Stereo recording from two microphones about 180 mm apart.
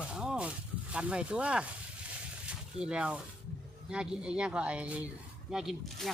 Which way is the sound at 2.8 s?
5° right (ahead or behind).